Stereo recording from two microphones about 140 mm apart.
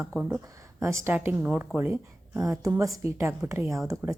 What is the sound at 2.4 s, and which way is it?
Speech, 25° right (ahead or behind).